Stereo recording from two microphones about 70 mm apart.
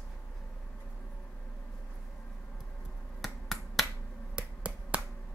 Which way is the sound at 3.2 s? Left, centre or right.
Centre.